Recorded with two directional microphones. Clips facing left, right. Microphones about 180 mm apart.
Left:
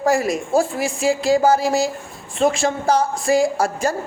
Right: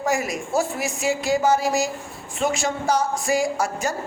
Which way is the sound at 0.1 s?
30° left (ahead or behind).